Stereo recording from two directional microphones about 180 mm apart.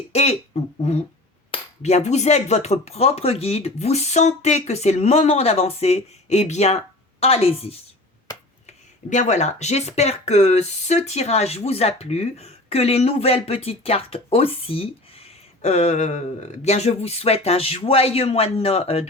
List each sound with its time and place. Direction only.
0.1 s speech: 35° left (ahead or behind)